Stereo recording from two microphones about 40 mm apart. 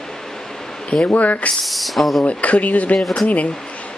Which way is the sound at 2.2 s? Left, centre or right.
Left.